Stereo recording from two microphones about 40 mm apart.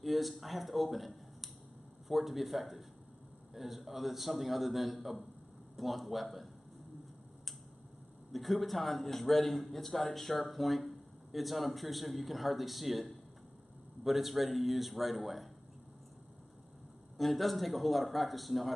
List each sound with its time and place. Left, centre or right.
0.0 s a man's voice: centre
8.3 s a man's voice: centre
17.2 s a man's voice: centre